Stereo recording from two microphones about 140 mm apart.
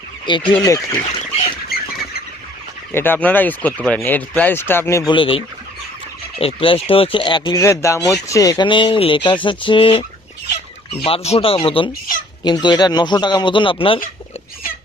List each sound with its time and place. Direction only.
0.3 s speech: 35° left (ahead or behind)
0.6 s speech: 25° left (ahead or behind)
1.6 s rodents: 90° left
2.9 s speech: 15° left (ahead or behind)
5.0 s speech: 40° left (ahead or behind)
6.4 s speech: 40° left (ahead or behind)
7.6 s speech: 20° left (ahead or behind); by 14.0 s 40° left (ahead or behind)